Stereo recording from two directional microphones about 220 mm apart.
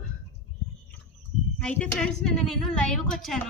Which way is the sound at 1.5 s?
5° left (ahead or behind).